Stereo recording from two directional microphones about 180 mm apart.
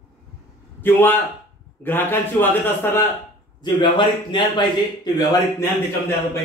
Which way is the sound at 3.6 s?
25° left (ahead or behind).